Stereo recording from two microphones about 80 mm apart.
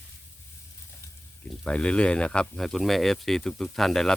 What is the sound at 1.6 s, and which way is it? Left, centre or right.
Speech, centre.